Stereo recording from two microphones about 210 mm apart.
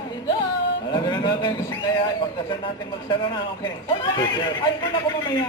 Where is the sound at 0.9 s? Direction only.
20° left (ahead or behind).